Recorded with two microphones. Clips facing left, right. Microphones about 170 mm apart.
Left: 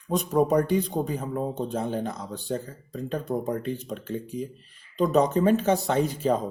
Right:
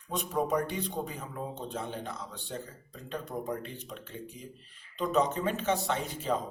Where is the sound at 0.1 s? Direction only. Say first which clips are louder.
Left 8 dB; 40° left (ahead or behind).